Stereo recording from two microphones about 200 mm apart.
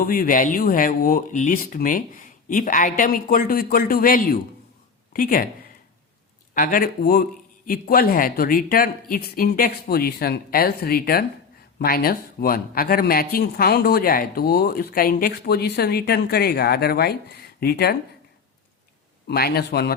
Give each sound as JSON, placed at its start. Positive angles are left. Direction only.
{"t": 0.1, "sound": "speech", "side_deg": 45}
{"t": 6.5, "sound": "speech", "side_deg": 45}
{"t": 19.3, "sound": "speech", "side_deg": 50}